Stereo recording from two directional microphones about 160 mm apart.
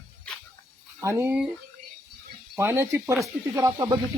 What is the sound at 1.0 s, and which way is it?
Speech, 15° right (ahead or behind).